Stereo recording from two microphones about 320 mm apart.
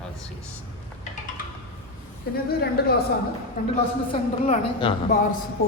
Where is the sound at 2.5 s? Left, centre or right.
Left.